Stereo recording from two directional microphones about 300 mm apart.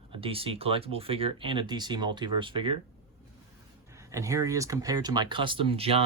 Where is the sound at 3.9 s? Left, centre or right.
Centre.